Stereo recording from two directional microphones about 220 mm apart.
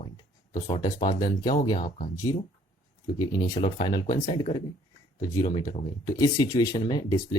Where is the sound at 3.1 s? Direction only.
20° left (ahead or behind).